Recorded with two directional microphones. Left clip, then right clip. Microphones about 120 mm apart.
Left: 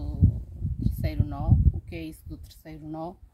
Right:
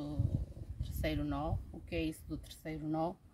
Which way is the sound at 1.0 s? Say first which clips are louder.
Left 1 dB; 25° right (ahead or behind).